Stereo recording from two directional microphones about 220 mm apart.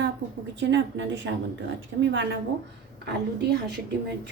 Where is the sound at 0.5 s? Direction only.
55° right (ahead or behind).